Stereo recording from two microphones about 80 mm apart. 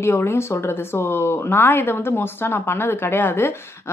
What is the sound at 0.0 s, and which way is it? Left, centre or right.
Speech, left.